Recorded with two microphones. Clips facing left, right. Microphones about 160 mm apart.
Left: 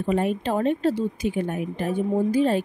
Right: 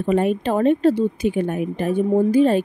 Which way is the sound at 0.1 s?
65° right (ahead or behind).